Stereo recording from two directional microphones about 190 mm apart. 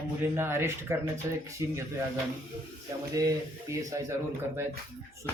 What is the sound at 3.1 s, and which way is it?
Speech, 20° right (ahead or behind).